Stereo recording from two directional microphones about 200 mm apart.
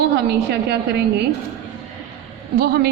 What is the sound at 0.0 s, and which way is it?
Speech, 55° right (ahead or behind).